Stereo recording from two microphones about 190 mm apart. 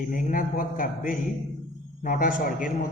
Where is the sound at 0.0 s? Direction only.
45° left (ahead or behind).